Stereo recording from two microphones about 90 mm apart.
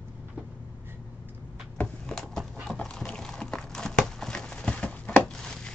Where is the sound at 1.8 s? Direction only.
5° left (ahead or behind).